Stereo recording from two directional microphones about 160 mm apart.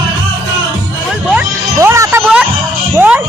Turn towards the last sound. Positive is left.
turn(degrees=-10)  # may be behind; listen again after turning